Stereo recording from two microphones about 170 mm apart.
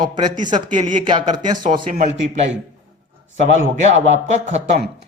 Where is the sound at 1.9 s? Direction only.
45° right (ahead or behind).